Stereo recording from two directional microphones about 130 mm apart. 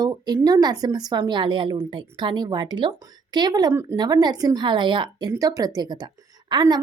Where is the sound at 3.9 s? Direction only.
30° right (ahead or behind).